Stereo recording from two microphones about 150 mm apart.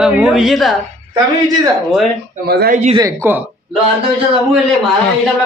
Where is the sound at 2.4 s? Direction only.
90° right.